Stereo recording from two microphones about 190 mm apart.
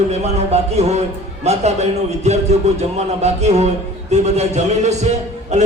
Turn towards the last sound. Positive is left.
turn(degrees=-35)  # may be behind; listen again after turning